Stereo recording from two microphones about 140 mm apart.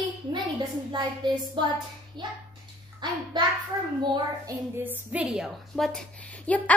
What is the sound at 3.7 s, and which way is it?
Speech, 20° right (ahead or behind).